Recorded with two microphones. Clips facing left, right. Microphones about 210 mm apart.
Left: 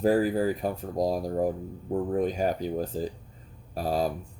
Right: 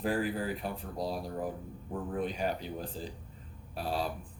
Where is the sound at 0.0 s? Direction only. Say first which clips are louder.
Left 9 dB; 40° left (ahead or behind).